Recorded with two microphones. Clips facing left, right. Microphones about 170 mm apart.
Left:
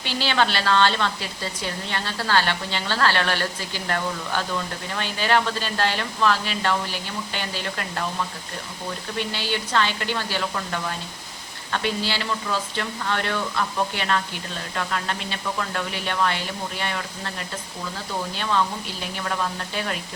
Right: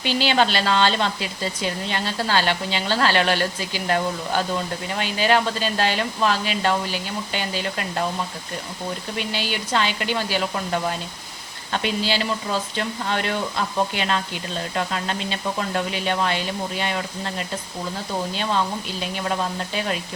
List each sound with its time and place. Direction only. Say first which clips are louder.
0.0 s speech: right 3 dB; 15° right (ahead or behind)
9.1 s speech: left 2 dB; 15° right (ahead or behind)
19.2 s speech: right 2 dB; 20° right (ahead or behind)